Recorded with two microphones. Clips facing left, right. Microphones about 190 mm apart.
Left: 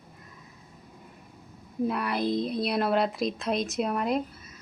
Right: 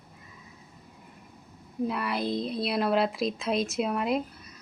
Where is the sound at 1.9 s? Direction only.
Centre (ahead or behind).